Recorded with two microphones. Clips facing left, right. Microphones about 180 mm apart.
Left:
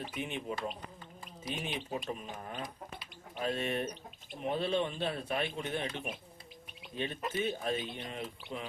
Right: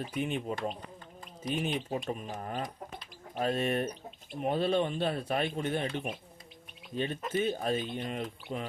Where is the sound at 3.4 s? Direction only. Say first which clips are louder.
Right 4 dB; 45° right (ahead or behind).